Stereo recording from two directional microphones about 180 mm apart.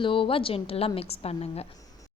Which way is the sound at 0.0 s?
30° left (ahead or behind).